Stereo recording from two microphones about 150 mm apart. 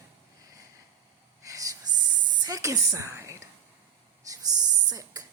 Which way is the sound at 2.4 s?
20° right (ahead or behind).